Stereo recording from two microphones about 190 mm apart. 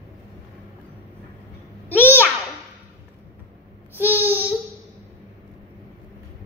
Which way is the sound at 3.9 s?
10° right (ahead or behind).